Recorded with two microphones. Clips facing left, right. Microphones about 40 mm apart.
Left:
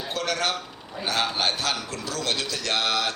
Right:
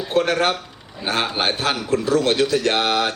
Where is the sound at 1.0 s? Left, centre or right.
Right.